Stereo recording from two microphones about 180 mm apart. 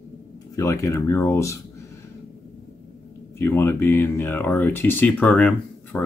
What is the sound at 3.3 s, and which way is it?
Speech, 10° left (ahead or behind).